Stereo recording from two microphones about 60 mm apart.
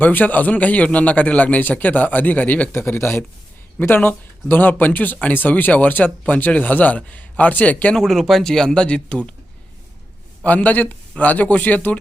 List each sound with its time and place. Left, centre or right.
0.0 s speech: left
2.7 s speech: left
7.9 s speech: centre
10.4 s speech: left